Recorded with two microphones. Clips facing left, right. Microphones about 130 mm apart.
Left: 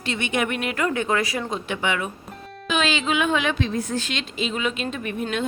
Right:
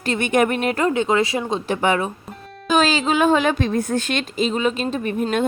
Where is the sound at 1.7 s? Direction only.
40° right (ahead or behind).